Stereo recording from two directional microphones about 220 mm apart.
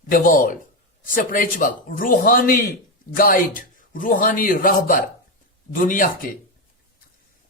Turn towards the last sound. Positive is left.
turn(degrees=40)  # may be behind; listen again after turning